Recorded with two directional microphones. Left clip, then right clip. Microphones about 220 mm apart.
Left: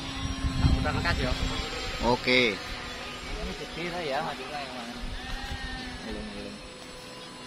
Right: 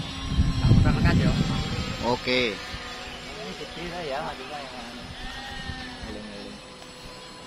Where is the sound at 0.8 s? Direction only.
35° left (ahead or behind).